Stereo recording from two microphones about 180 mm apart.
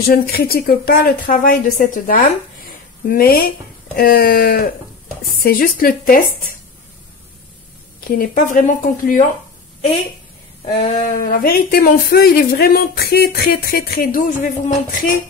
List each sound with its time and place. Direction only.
0.0 s a woman's voice: 55° left (ahead or behind)
8.0 s speech: 50° left (ahead or behind)
10.6 s a woman's voice: 40° left (ahead or behind)